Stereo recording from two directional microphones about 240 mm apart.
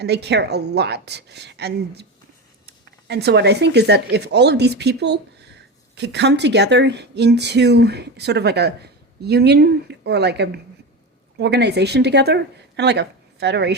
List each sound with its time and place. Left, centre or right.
0.0 s a woman's voice: right